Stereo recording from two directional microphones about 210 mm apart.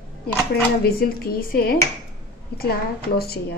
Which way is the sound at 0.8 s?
45° left (ahead or behind).